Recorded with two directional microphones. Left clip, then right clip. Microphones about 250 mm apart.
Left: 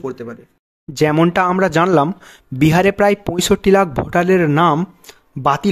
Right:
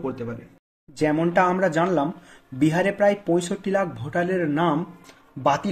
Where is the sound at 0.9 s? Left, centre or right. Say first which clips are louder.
Left 6 dB; left.